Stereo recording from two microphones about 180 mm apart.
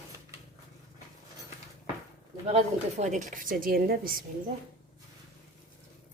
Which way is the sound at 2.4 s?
40° right (ahead or behind).